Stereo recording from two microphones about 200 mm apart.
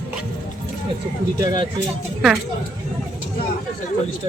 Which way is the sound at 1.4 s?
25° right (ahead or behind).